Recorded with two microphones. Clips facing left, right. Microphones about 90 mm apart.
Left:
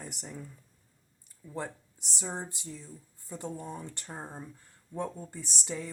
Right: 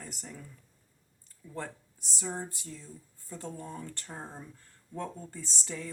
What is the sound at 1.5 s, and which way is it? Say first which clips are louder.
Speech: left 2 dB; 20° left (ahead or behind).